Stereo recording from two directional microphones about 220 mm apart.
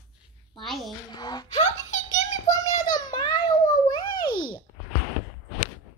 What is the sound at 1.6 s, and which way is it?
Giggle, 35° left (ahead or behind).